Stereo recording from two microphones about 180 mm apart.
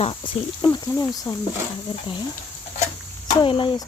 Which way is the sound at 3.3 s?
25° left (ahead or behind).